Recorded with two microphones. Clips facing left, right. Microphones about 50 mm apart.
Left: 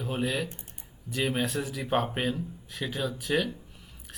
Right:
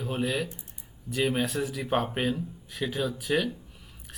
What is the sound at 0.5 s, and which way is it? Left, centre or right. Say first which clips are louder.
Typing: even; left.